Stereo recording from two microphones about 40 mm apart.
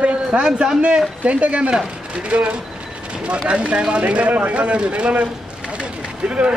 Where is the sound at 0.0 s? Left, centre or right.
Right.